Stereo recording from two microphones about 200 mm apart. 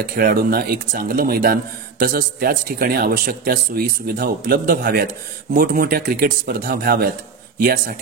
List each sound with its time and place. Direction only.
0.0 s speech: 50° right (ahead or behind)